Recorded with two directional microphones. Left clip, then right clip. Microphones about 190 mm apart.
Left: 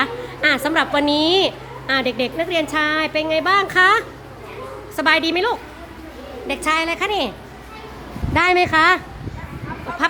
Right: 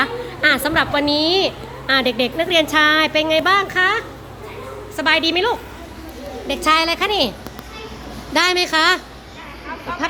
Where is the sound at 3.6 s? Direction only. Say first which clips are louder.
Left 3 dB; 30° left (ahead or behind).